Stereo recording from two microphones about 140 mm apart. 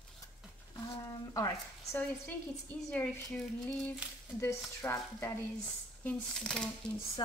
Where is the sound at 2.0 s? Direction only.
10° left (ahead or behind).